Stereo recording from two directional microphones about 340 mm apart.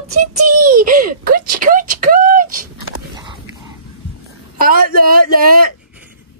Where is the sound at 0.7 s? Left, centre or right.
Right.